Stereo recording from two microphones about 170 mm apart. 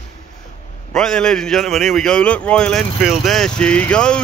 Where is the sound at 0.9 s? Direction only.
5° left (ahead or behind).